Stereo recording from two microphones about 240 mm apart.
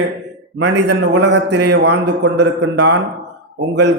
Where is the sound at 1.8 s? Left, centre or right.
Right.